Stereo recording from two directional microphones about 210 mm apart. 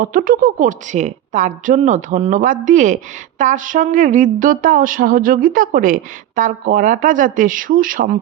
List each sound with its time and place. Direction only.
0.0 s a woman's voice: 40° right (ahead or behind)